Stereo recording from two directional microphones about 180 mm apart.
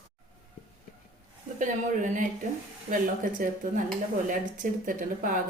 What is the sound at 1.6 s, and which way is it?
Speech, 45° right (ahead or behind).